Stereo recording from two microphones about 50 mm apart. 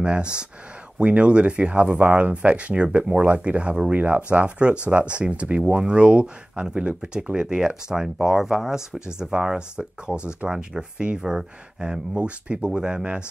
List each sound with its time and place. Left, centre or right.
0.0 s speech: centre